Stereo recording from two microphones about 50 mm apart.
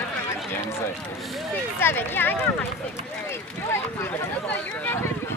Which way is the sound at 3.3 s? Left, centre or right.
Left.